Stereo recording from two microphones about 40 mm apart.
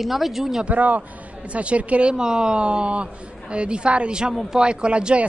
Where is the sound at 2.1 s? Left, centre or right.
Centre.